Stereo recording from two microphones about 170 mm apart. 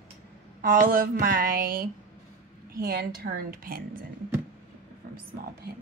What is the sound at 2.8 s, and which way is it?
A woman's voice, 65° right (ahead or behind).